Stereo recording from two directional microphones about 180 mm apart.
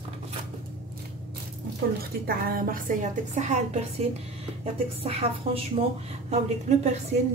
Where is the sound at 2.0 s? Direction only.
55° right (ahead or behind).